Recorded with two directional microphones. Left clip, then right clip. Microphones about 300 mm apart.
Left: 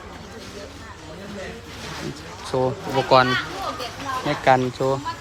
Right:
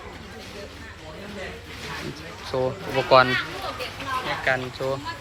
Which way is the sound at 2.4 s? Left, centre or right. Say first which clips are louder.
Left 3 dB; centre.